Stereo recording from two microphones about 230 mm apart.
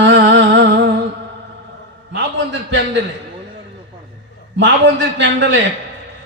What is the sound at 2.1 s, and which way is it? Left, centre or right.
Speech, right.